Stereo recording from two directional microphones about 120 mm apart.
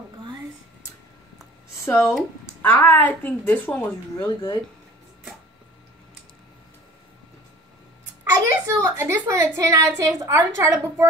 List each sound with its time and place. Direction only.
1.9 s a woman's voice: 20° left (ahead or behind)
4.2 s speech: 35° left (ahead or behind)
8.2 s a sound: 25° right (ahead or behind)
9.9 s a woman's voice: 25° right (ahead or behind)